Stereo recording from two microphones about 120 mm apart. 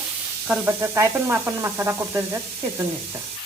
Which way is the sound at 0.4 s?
10° right (ahead or behind).